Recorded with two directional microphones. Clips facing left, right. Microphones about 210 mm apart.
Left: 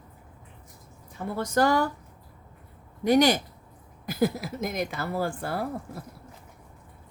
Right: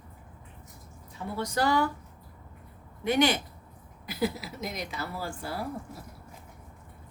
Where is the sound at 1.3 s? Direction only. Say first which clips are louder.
Left 4 dB; 50° left (ahead or behind).